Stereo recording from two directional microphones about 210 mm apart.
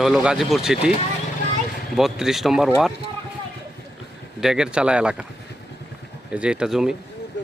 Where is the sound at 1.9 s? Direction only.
Centre (ahead or behind).